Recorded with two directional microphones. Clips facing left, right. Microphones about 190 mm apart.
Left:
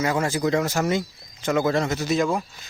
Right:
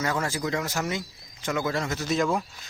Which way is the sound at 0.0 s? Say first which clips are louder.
Left 5 dB; 15° left (ahead or behind).